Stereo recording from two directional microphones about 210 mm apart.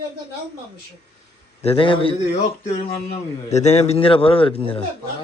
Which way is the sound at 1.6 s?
25° left (ahead or behind).